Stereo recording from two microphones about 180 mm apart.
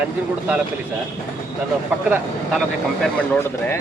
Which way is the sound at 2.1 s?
Centre (ahead or behind).